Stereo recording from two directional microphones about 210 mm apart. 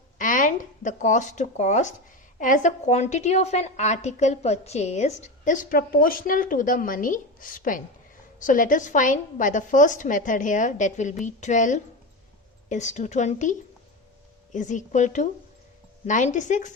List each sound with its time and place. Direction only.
0.2 s a woman's voice: 40° left (ahead or behind)